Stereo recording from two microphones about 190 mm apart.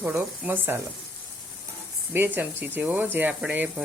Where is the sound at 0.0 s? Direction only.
10° right (ahead or behind).